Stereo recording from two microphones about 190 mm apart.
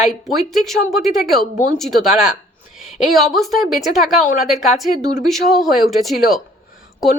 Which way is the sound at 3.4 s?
Centre (ahead or behind).